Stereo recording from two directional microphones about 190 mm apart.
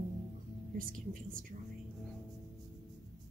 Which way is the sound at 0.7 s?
45° right (ahead or behind).